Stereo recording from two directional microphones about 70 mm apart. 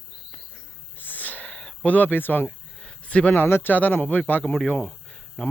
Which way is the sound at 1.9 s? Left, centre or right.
Left.